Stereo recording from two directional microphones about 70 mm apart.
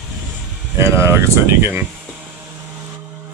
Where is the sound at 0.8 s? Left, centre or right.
Right.